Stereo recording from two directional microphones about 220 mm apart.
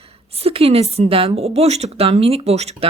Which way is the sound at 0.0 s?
25° right (ahead or behind).